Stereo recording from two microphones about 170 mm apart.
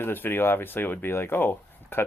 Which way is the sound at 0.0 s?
10° left (ahead or behind).